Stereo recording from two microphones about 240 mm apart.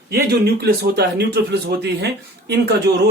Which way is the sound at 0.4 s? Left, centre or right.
Right.